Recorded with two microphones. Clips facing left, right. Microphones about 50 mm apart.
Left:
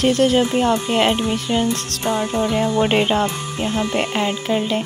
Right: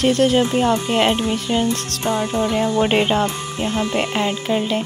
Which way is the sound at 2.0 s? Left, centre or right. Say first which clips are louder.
Even; left.